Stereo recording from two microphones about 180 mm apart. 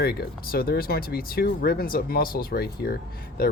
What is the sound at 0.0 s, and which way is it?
Speech, 60° left (ahead or behind).